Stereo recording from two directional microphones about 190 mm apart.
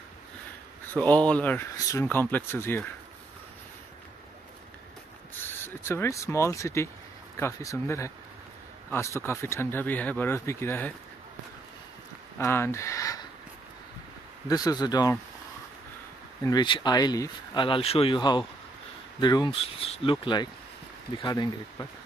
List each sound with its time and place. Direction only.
0.9 s speech: 5° left (ahead or behind)
5.4 s speech: 10° left (ahead or behind)
12.4 s speech: 15° left (ahead or behind)
14.5 s speech: 20° left (ahead or behind)
16.4 s speech: 25° left (ahead or behind)